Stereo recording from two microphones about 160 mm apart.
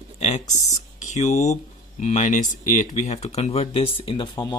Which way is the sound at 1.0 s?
50° left (ahead or behind).